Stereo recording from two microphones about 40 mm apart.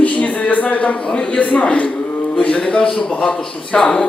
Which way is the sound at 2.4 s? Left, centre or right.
Left.